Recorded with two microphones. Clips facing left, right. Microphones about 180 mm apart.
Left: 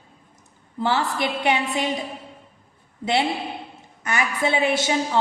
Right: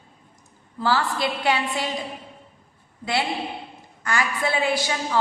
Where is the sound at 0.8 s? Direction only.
20° left (ahead or behind).